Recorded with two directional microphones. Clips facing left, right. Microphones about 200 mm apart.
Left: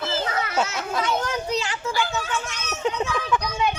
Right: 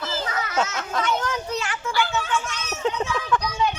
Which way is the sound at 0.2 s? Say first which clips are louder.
Left 2 dB; 30° left (ahead or behind).